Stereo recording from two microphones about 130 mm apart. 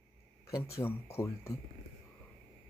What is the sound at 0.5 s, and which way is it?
Speech, 20° left (ahead or behind).